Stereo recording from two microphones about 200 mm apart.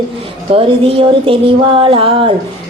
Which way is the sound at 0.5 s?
25° right (ahead or behind).